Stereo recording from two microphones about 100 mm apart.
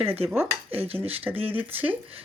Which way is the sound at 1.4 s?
20° right (ahead or behind).